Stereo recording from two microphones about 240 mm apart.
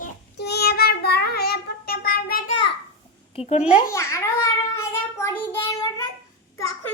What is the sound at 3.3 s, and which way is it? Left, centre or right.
Speech, left.